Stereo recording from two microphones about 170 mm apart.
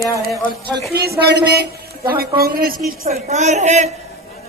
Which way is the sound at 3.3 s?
45° right (ahead or behind).